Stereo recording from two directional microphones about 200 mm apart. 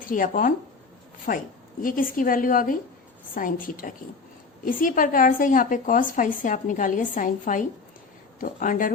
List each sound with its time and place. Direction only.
0.1 s a woman's voice: 45° left (ahead or behind)